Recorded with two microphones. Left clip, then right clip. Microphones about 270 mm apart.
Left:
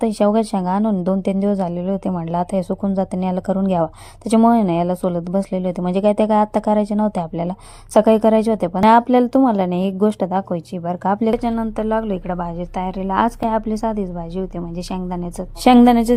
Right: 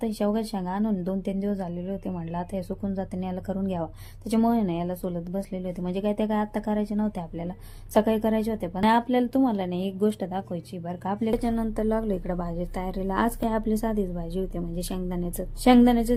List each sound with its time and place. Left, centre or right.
0.0 s a woman's voice: left
15.6 s a woman's voice: left